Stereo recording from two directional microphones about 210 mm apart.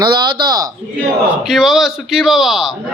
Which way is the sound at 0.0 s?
20° right (ahead or behind).